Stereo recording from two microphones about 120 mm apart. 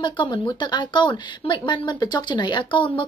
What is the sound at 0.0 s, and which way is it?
Speech, 40° left (ahead or behind).